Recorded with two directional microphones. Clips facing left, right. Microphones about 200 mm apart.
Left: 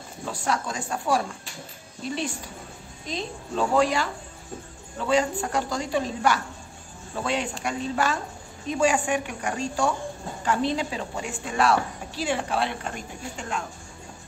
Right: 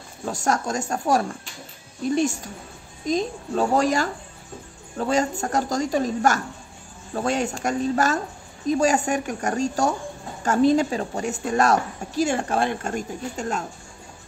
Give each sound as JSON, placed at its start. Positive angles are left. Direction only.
{"t": 0.2, "sound": "a woman's voice", "side_deg": -45}